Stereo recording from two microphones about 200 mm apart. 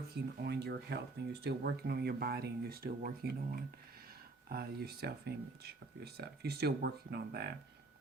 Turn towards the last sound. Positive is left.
turn(degrees=-55)  # may be behind; listen again after turning